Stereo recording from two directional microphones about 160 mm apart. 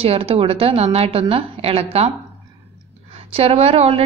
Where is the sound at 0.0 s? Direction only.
40° right (ahead or behind).